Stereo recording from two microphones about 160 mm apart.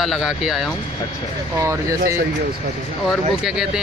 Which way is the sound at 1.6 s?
20° right (ahead or behind).